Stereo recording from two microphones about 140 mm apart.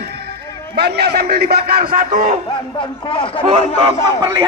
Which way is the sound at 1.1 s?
90° right.